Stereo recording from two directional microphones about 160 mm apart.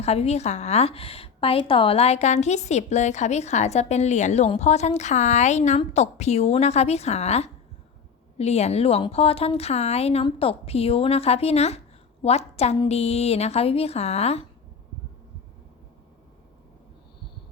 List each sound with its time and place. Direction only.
0.0 s a woman's voice: 40° left (ahead or behind)